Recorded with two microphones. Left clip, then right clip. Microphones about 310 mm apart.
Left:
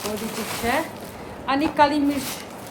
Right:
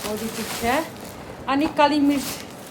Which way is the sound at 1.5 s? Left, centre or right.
Centre.